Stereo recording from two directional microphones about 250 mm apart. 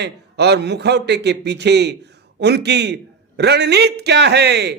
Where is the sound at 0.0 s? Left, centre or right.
Right.